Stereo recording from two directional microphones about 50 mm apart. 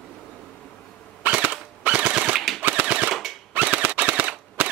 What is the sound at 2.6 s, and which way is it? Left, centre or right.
Machine gun, right.